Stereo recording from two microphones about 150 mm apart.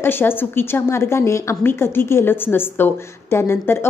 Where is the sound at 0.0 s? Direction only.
15° left (ahead or behind).